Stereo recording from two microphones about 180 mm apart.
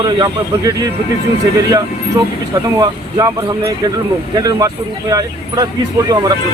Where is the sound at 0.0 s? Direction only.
20° right (ahead or behind).